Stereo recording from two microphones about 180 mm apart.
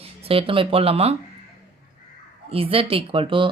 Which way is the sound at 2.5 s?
30° right (ahead or behind).